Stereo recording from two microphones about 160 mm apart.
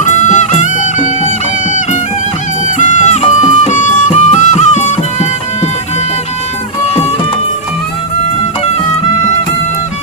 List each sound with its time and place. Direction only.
0.0 s music: 50° left (ahead or behind)
2.7 s music: 50° left (ahead or behind)